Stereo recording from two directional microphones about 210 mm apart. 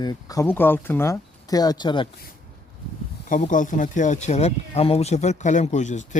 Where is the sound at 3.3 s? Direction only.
35° left (ahead or behind).